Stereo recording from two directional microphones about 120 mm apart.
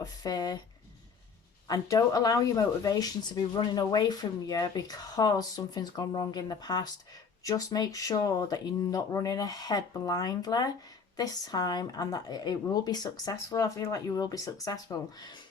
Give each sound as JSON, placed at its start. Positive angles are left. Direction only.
{"t": 0.0, "sound": "speech", "side_deg": 30}
{"t": 1.6, "sound": "speech", "side_deg": 30}